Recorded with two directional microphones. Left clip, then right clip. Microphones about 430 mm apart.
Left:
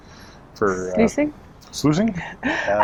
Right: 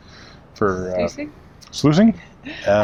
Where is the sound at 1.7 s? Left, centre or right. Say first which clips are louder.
Right 4 dB; right.